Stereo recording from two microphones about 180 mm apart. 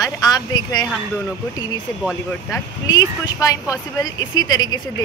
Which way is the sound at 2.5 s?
20° left (ahead or behind).